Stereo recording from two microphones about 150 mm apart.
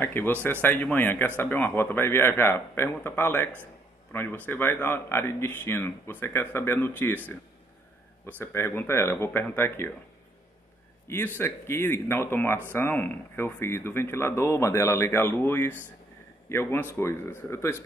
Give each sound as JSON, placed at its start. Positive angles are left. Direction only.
{"t": 0.0, "sound": "speech", "side_deg": 15}
{"t": 8.3, "sound": "speech", "side_deg": 15}
{"t": 11.1, "sound": "speech", "side_deg": 15}